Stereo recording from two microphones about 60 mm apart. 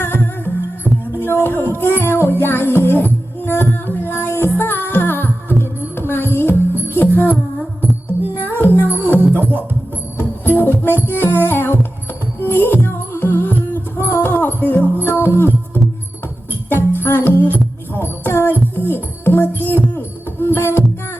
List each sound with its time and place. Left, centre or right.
0.0 s music: left
0.9 s music: centre
1.2 s music: left
8.4 s music: left
9.1 s music: right
10.4 s music: left
16.6 s music: left